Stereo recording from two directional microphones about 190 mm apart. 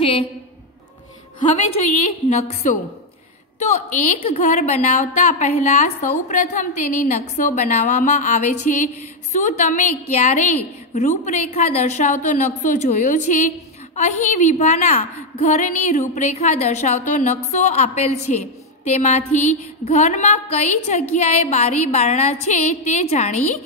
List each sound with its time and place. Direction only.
2.2 s a woman's voice: 35° left (ahead or behind)